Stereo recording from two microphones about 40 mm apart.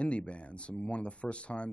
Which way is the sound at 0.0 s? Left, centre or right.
Left.